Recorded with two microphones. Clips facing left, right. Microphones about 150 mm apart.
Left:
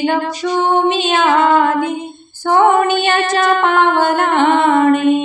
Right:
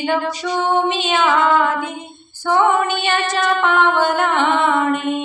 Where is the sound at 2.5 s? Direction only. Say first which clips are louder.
Left 4 dB; 45° left (ahead or behind).